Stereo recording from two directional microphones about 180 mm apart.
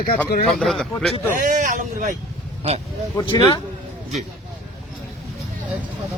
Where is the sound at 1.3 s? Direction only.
45° right (ahead or behind).